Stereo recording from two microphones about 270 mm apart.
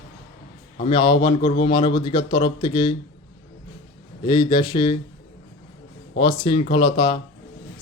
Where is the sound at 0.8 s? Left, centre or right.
Centre.